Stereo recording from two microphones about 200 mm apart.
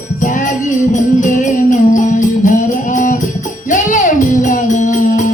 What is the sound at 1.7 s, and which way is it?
Music, 40° left (ahead or behind).